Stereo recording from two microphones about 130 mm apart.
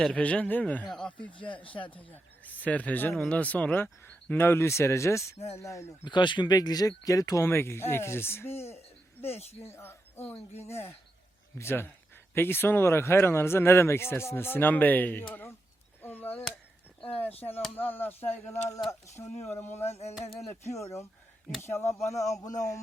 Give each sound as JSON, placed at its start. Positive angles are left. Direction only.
{"t": 0.0, "sound": "speech", "side_deg": 10}
{"t": 1.3, "sound": "speech", "side_deg": 40}
{"t": 1.9, "sound": "speech", "side_deg": 10}
{"t": 6.1, "sound": "speech", "side_deg": 35}
{"t": 9.2, "sound": "speech", "side_deg": 55}
{"t": 9.6, "sound": "speech", "side_deg": 20}
{"t": 10.3, "sound": "speech", "side_deg": 60}
{"t": 10.7, "sound": "speech", "side_deg": 20}
{"t": 16.0, "sound": "chop", "side_deg": 15}
{"t": 17.3, "sound": "speech", "side_deg": 50}
{"t": 17.7, "sound": "speech", "side_deg": 15}
{"t": 19.8, "sound": "speech", "side_deg": 55}
{"t": 20.5, "sound": "speech", "side_deg": 20}